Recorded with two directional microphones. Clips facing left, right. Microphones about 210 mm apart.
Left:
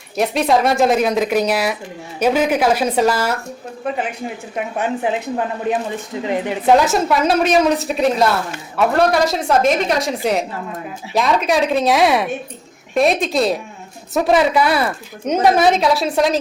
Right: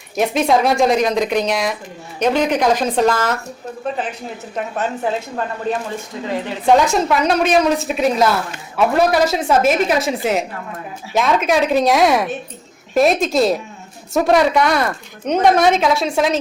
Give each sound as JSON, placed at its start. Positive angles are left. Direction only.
{"t": 0.2, "sound": "a woman's voice", "side_deg": 0}
{"t": 4.5, "sound": "speech", "side_deg": 15}
{"t": 6.7, "sound": "a woman's voice", "side_deg": 5}